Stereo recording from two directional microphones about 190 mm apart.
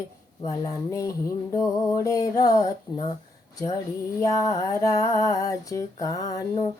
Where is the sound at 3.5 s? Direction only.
20° left (ahead or behind).